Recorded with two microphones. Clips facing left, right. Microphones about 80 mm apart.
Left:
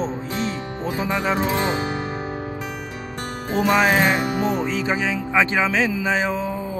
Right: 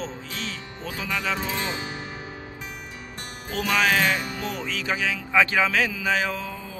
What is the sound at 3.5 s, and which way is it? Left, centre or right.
Music, left.